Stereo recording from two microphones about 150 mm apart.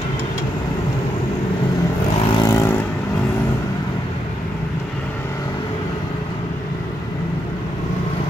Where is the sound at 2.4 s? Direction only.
20° left (ahead or behind).